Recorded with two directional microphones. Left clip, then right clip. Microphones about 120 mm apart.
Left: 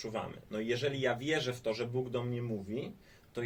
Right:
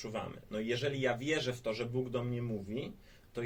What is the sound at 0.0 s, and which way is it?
Speech, 30° left (ahead or behind).